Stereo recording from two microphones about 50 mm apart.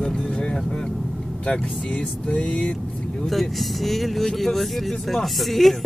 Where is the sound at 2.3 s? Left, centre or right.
Left.